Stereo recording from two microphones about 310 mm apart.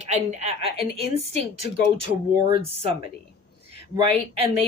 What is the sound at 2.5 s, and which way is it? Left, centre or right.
Speech, centre.